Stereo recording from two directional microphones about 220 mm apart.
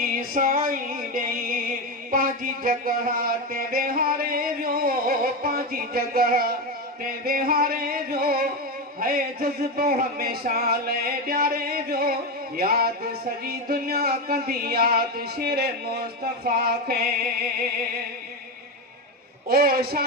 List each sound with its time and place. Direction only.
0.0 s music: 40° right (ahead or behind)
2.0 s a sound: 40° right (ahead or behind)
9.0 s speech: 40° right (ahead or behind)
19.5 s speech: 40° right (ahead or behind)